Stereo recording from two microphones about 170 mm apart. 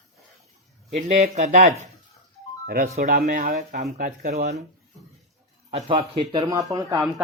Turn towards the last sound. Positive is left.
turn(degrees=-20)  # may be behind; listen again after turning